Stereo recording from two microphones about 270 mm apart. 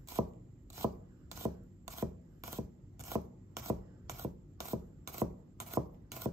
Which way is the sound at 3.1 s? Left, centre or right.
Centre.